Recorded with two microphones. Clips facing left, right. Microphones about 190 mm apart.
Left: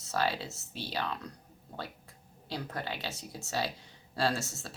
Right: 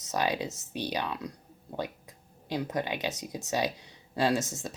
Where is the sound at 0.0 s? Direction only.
15° right (ahead or behind).